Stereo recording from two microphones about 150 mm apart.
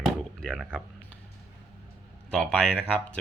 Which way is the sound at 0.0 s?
Centre (ahead or behind).